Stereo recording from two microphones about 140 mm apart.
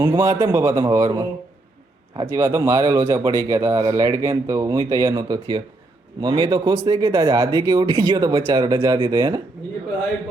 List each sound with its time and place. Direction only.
0.0 s speech: 20° right (ahead or behind)
2.2 s speech: 20° right (ahead or behind)